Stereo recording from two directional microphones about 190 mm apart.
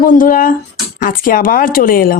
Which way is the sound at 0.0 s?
45° left (ahead or behind).